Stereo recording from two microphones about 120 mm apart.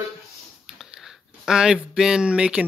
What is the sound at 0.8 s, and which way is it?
Speech, 5° right (ahead or behind).